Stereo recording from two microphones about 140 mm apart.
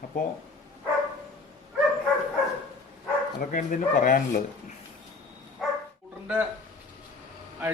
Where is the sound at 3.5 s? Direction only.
70° left (ahead or behind).